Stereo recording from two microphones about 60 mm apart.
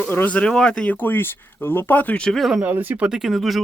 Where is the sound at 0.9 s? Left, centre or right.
Left.